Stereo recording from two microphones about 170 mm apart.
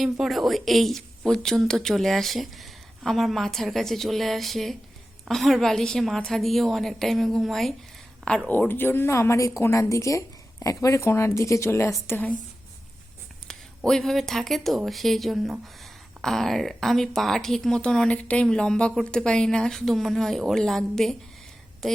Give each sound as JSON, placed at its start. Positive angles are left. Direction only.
{"t": 0.0, "sound": "a woman's voice", "side_deg": 0}
{"t": 13.5, "sound": "speech", "side_deg": 5}